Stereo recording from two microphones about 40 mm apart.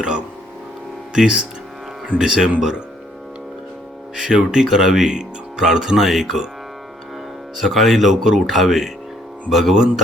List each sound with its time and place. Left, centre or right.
1.1 s speech: centre
4.1 s speech: centre
7.5 s speech: centre
9.7 s speech: centre